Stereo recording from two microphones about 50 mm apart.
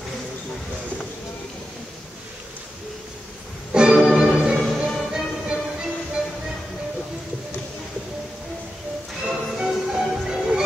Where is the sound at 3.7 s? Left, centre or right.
Centre.